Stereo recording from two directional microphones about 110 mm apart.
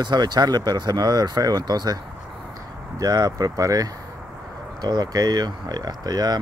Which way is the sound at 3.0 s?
35° right (ahead or behind).